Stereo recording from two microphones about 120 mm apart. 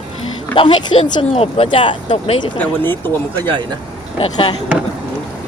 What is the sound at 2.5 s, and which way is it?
Speech, 15° left (ahead or behind).